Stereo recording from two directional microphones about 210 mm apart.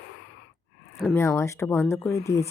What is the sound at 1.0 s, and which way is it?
Speech, 10° left (ahead or behind).